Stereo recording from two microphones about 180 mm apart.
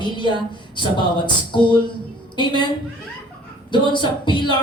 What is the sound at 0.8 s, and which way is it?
A woman's voice, 25° left (ahead or behind).